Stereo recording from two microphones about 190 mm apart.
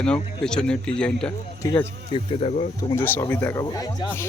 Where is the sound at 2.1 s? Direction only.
30° left (ahead or behind).